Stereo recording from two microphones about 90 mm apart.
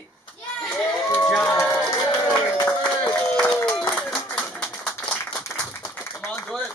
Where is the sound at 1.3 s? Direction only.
10° left (ahead or behind).